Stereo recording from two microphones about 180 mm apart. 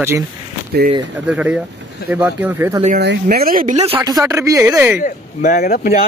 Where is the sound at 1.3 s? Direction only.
5° right (ahead or behind).